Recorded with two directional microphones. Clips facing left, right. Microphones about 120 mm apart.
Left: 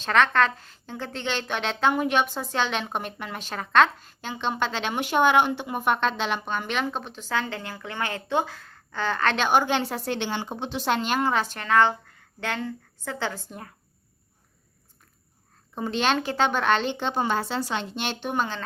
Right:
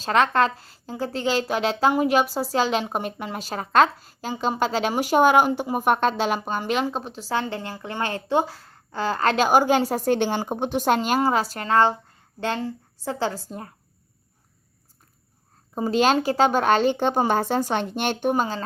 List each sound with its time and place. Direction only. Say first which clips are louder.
0.0 s a woman's voice: right 2 dB; 30° right (ahead or behind)
15.7 s a woman's voice: right 5 dB; 40° right (ahead or behind)